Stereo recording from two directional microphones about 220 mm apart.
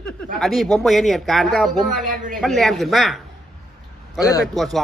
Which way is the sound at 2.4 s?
Centre (ahead or behind).